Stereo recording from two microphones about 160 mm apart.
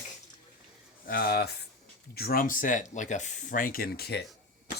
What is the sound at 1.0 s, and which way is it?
Speech, 70° left (ahead or behind).